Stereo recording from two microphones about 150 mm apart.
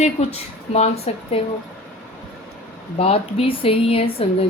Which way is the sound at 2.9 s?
40° left (ahead or behind).